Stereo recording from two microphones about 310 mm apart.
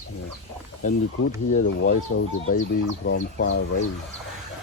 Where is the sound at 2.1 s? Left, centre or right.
Left.